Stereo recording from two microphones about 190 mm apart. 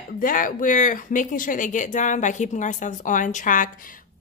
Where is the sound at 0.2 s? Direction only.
45° left (ahead or behind).